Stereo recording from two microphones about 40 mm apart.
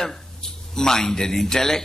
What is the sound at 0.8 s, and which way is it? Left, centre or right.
Mantra, centre.